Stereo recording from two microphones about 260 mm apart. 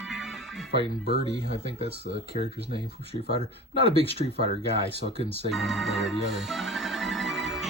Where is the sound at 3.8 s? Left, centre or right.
Left.